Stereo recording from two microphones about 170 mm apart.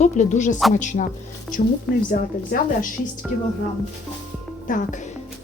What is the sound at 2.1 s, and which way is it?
Speech, 55° left (ahead or behind).